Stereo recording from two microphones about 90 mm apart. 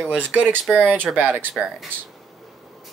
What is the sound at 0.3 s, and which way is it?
Speech, 20° right (ahead or behind).